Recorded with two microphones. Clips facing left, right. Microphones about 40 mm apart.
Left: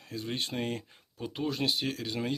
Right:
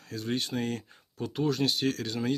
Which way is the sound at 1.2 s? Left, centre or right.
Centre.